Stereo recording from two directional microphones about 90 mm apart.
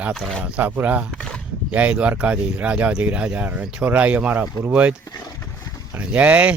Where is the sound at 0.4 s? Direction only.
15° right (ahead or behind).